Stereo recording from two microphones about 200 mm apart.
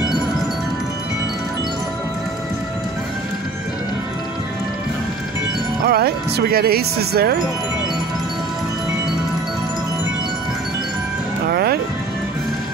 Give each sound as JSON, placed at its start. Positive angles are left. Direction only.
{"t": 5.9, "sound": "speech", "side_deg": -50}
{"t": 11.4, "sound": "music", "side_deg": -50}